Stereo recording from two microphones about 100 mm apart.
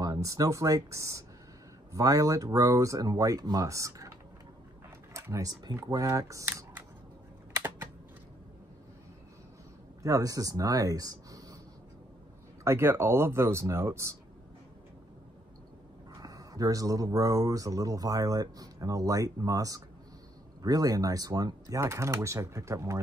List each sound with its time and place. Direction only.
0.0 s speech: 35° right (ahead or behind)
5.1 s speech: 30° right (ahead or behind)
7.5 s typing: 25° right (ahead or behind)
10.0 s speech: 35° right (ahead or behind)
12.6 s speech: 25° right (ahead or behind)
16.2 s speech: 35° right (ahead or behind)